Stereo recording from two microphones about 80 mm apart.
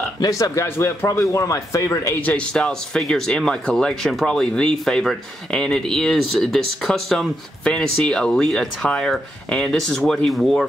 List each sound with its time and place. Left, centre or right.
0.2 s speech: left
0.7 s speech: left
2.2 s speech: centre